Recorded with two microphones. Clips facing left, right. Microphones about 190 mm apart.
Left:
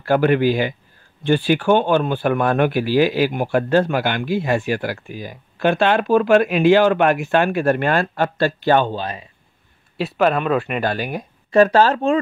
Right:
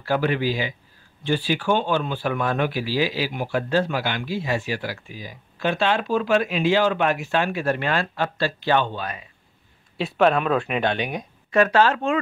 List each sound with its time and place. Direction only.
0.0 s speech: 55° left (ahead or behind)
8.9 s speech: 30° left (ahead or behind)
9.9 s speech: centre (ahead or behind)
11.5 s speech: 35° left (ahead or behind)